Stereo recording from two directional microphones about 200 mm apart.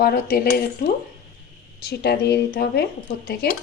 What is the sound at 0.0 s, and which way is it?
A woman's voice, 50° left (ahead or behind).